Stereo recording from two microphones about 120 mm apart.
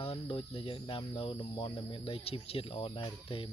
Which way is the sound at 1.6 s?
45° left (ahead or behind).